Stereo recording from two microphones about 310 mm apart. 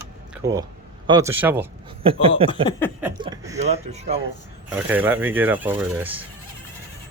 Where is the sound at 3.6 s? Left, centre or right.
Right.